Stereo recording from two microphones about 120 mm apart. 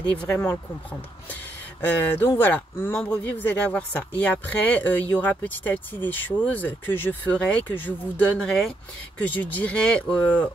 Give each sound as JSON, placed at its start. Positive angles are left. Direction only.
{"t": 1.9, "sound": "speech", "side_deg": 20}
{"t": 8.4, "sound": "speech", "side_deg": 5}
{"t": 9.2, "sound": "speech", "side_deg": 15}